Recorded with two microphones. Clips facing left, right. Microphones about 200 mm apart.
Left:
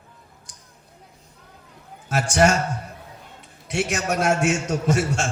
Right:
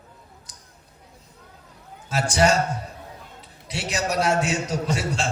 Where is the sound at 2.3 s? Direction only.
60° left (ahead or behind).